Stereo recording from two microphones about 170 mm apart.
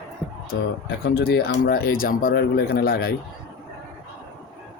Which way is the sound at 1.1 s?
70° left (ahead or behind).